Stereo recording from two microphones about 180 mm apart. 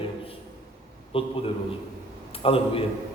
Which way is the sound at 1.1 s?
30° left (ahead or behind).